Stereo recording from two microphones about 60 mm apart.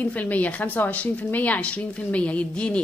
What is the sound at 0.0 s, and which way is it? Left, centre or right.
A woman's voice, left.